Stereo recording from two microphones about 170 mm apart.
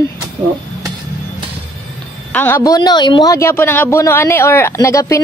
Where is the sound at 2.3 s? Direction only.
10° left (ahead or behind).